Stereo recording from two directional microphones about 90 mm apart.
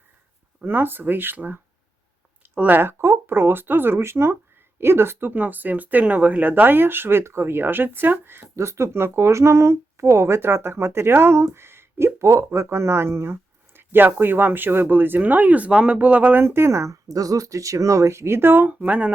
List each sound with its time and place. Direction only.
0.6 s speech: 25° right (ahead or behind)